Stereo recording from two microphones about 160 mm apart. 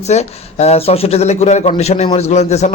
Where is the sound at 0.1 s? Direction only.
45° left (ahead or behind).